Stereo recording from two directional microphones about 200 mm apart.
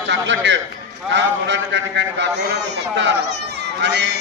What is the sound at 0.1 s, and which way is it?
A man's voice, 65° right (ahead or behind).